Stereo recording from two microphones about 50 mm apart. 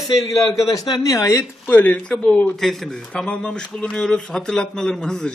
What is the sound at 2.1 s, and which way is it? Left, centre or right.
Speech, left.